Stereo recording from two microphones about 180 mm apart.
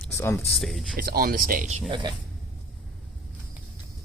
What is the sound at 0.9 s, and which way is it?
Speech, 55° right (ahead or behind).